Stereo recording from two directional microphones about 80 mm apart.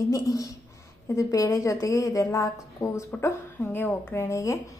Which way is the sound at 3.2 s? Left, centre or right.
Left.